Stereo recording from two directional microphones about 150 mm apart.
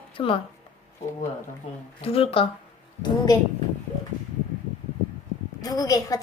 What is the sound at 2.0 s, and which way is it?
Speech, 40° left (ahead or behind).